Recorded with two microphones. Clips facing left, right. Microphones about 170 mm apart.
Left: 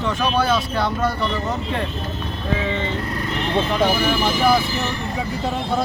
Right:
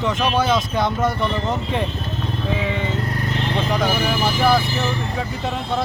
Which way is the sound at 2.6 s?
10° right (ahead or behind).